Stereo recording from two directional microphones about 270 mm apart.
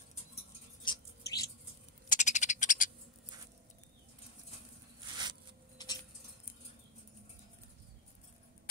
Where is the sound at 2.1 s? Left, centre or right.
Left.